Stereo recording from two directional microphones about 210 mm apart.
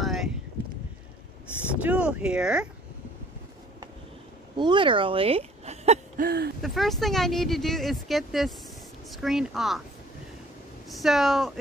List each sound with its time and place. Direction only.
0.0 s a sound: centre (ahead or behind)
1.8 s speech: 5° right (ahead or behind)
4.6 s speech: 20° right (ahead or behind)
6.2 s speech: 50° right (ahead or behind)
6.6 s speech: centre (ahead or behind)
10.9 s speech: centre (ahead or behind)